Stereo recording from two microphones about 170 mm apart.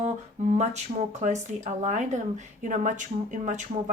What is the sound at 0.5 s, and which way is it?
Speech, 40° right (ahead or behind).